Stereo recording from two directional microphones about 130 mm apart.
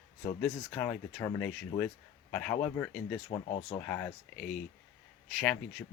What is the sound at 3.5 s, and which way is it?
Speech, 45° left (ahead or behind).